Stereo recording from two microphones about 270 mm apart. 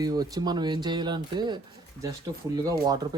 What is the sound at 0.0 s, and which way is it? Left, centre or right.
Speech, centre.